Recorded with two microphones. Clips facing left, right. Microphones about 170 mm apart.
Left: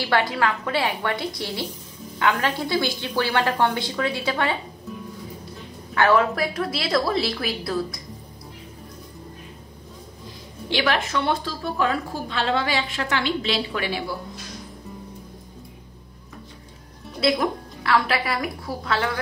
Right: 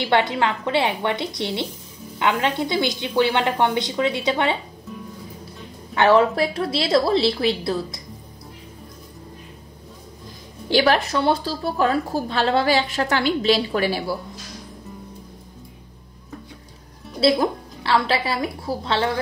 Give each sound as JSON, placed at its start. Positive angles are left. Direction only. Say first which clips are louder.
{"t": 0.0, "sound": "a woman's voice", "louder": "right 2 dB", "side_deg": -20}
{"t": 5.9, "sound": "a woman's voice", "louder": "right 3 dB", "side_deg": -25}
{"t": 10.7, "sound": "a woman's voice", "louder": "right 5 dB", "side_deg": -35}
{"t": 17.2, "sound": "a woman's voice", "louder": "right 3 dB", "side_deg": -30}